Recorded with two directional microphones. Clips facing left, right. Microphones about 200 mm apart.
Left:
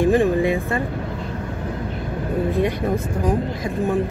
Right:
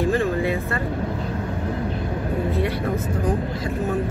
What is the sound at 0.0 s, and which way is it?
Music, 15° left (ahead or behind).